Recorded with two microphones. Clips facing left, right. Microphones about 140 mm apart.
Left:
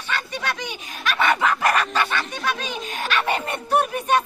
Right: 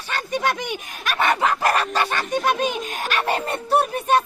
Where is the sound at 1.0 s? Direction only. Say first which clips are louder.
Even; 45° right (ahead or behind).